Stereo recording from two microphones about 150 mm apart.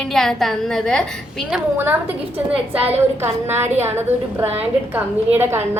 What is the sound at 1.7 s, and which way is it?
A woman's voice, 15° right (ahead or behind).